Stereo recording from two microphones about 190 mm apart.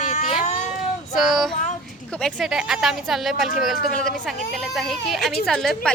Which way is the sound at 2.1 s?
5° left (ahead or behind).